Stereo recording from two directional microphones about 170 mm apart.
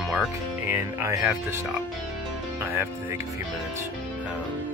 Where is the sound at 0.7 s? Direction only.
15° right (ahead or behind).